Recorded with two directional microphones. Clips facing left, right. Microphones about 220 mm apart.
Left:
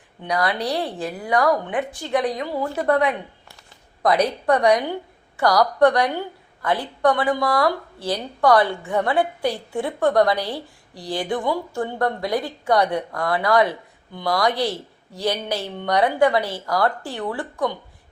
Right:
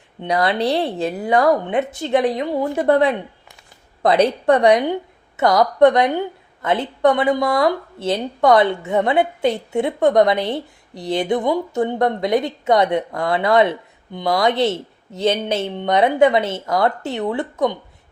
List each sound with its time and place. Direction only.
0.2 s a woman's voice: 25° right (ahead or behind)